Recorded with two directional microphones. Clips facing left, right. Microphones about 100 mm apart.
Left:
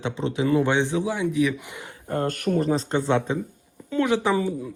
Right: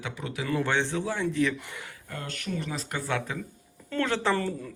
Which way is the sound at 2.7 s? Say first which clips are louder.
Left 9 dB; 30° left (ahead or behind).